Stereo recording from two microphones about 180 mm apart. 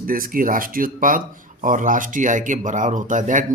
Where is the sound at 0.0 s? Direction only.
50° right (ahead or behind).